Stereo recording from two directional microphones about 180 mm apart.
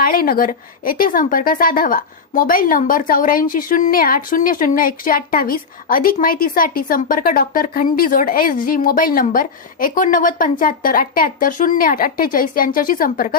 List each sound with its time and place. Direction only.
0.0 s speech: 55° left (ahead or behind)